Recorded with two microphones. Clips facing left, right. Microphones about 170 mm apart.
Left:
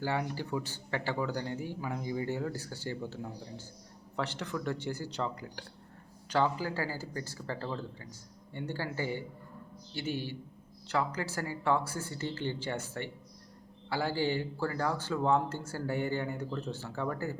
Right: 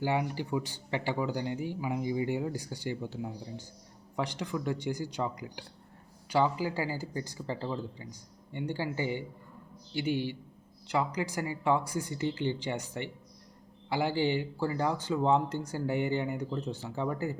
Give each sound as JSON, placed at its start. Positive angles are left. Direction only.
{"t": 0.0, "sound": "speech", "side_deg": -15}